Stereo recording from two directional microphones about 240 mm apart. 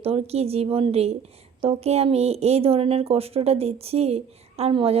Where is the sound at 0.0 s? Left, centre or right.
Right.